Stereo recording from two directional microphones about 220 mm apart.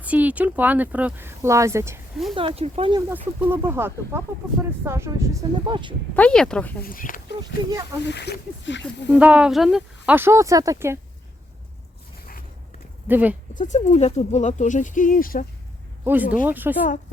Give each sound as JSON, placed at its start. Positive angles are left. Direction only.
{"t": 0.0, "sound": "speech", "side_deg": -5}
{"t": 2.3, "sound": "speech", "side_deg": -25}
{"t": 3.1, "sound": "speech", "side_deg": -10}
{"t": 6.1, "sound": "speech", "side_deg": 5}
{"t": 6.8, "sound": "speech", "side_deg": 40}
{"t": 8.0, "sound": "speech", "side_deg": 50}
{"t": 9.0, "sound": "speech", "side_deg": -5}
{"t": 13.1, "sound": "speech", "side_deg": -10}
{"t": 13.5, "sound": "speech", "side_deg": 35}
{"t": 16.0, "sound": "speech", "side_deg": -10}